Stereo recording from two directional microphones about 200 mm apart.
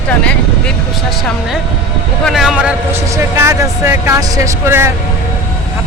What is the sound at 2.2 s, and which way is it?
A man's voice, centre (ahead or behind).